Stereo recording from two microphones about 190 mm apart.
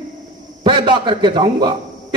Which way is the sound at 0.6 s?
25° right (ahead or behind).